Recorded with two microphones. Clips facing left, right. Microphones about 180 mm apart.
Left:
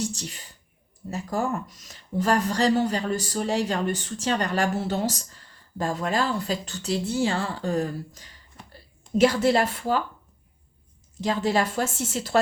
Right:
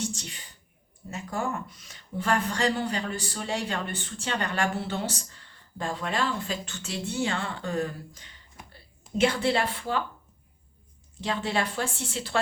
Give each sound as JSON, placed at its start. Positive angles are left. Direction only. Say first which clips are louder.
{"t": 0.0, "sound": "speech", "louder": "left 3 dB", "side_deg": 35}
{"t": 11.2, "sound": "speech", "louder": "left 5 dB", "side_deg": 40}